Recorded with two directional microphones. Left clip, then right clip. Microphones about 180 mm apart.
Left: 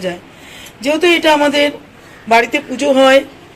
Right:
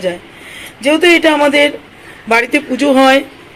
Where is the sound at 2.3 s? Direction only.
25° right (ahead or behind).